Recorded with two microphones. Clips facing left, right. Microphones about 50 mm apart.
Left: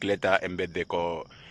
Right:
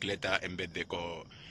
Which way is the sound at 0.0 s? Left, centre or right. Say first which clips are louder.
Left 9 dB; centre.